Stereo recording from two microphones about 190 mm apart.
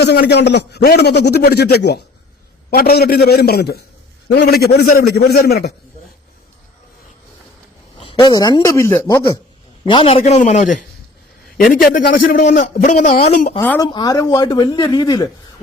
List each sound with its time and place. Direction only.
0.0 s a man's voice: 60° left (ahead or behind)
7.9 s speech: 25° left (ahead or behind)
9.8 s a man's voice: 25° left (ahead or behind)
13.6 s speech: 10° left (ahead or behind)
13.8 s speech: 20° left (ahead or behind)